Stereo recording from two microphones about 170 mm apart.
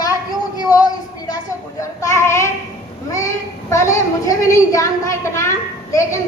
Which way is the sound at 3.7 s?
15° left (ahead or behind).